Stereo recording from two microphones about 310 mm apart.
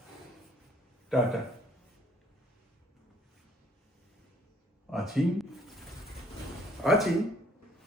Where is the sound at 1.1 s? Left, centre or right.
Centre.